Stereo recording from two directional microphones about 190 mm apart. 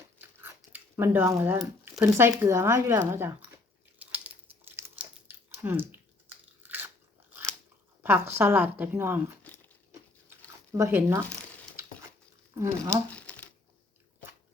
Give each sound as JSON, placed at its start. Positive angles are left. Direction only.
{"t": 0.0, "sound": "a sound", "side_deg": -10}
{"t": 2.4, "sound": "chewing", "side_deg": -15}
{"t": 6.6, "sound": "biting", "side_deg": -10}
{"t": 8.0, "sound": "a woman's voice", "side_deg": -10}
{"t": 9.4, "sound": "a sound", "side_deg": 10}
{"t": 10.7, "sound": "a woman's voice", "side_deg": -15}
{"t": 12.5, "sound": "a woman's voice", "side_deg": -15}
{"t": 13.1, "sound": "crumpling", "side_deg": 5}